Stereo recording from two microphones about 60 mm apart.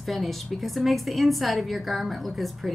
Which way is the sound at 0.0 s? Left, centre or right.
Centre.